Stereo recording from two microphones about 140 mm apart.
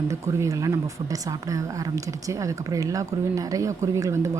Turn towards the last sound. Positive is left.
turn(degrees=-20)  # may be behind; listen again after turning